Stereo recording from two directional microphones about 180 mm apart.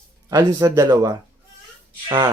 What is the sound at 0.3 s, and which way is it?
Speech, 20° right (ahead or behind).